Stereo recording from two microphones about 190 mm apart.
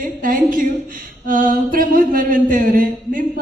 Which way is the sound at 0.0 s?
45° right (ahead or behind).